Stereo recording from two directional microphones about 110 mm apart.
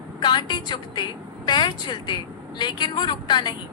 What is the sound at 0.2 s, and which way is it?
A woman's voice, 40° left (ahead or behind).